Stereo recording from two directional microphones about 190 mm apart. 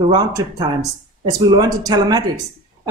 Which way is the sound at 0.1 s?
20° right (ahead or behind).